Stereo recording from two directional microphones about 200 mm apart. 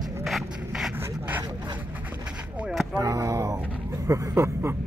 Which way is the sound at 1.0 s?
10° right (ahead or behind).